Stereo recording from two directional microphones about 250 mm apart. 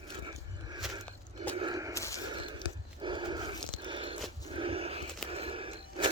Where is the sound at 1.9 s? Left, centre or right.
Centre.